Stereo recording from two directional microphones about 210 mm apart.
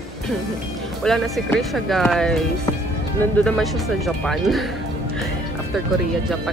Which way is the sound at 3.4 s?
Centre (ahead or behind).